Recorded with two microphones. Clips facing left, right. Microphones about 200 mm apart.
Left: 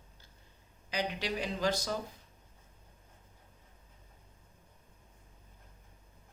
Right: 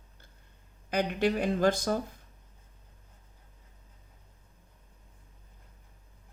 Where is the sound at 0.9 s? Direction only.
55° right (ahead or behind).